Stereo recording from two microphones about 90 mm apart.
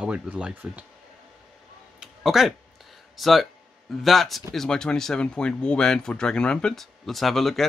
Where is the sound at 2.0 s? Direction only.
5° right (ahead or behind).